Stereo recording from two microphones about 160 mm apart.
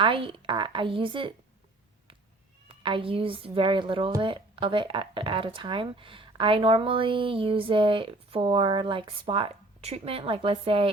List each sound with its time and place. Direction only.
0.0 s speech: 35° right (ahead or behind)
2.6 s speech: 35° right (ahead or behind)